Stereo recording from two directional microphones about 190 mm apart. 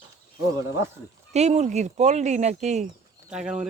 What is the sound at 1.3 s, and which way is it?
Speech, 35° right (ahead or behind).